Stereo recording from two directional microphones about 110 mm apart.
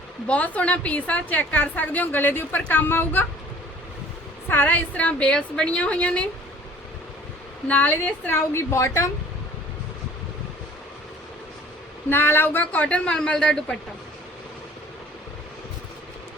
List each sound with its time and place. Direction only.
0.3 s a woman's voice: 15° left (ahead or behind)
4.4 s a woman's voice: 15° left (ahead or behind)
7.7 s a woman's voice: 15° left (ahead or behind)
12.0 s a woman's voice: 20° left (ahead or behind)